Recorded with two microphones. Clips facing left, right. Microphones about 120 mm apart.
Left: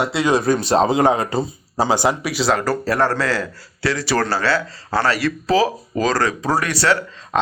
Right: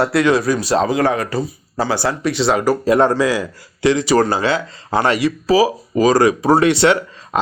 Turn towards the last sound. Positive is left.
turn(degrees=-25)  # may be behind; listen again after turning